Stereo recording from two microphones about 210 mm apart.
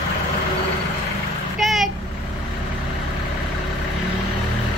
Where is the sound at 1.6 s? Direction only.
Centre (ahead or behind).